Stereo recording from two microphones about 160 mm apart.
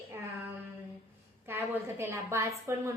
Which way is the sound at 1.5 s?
15° right (ahead or behind).